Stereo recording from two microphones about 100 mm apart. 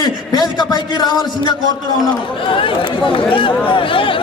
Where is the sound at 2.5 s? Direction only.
60° left (ahead or behind).